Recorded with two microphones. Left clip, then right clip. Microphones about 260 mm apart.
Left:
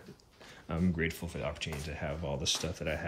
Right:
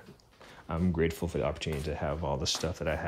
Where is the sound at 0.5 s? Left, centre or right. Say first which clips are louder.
Right 2 dB; centre.